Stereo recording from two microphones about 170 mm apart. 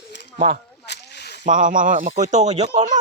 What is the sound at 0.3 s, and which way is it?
Speech, 40° right (ahead or behind).